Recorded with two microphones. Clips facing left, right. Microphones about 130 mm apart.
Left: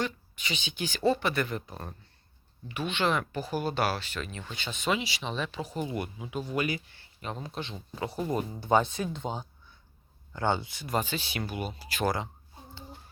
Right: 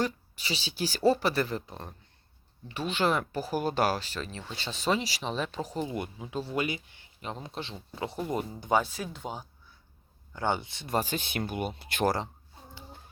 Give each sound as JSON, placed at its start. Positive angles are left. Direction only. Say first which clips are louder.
{"t": 0.0, "sound": "speech", "louder": "right 2 dB", "side_deg": -35}
{"t": 2.9, "sound": "speech", "louder": "right 1 dB", "side_deg": -40}
{"t": 6.3, "sound": "speech", "louder": "even", "side_deg": -30}
{"t": 8.6, "sound": "speech", "louder": "left 3 dB", "side_deg": -5}
{"t": 11.0, "sound": "speech", "louder": "right 2 dB", "side_deg": -50}
{"t": 12.0, "sound": "speech", "louder": "right 2 dB", "side_deg": -35}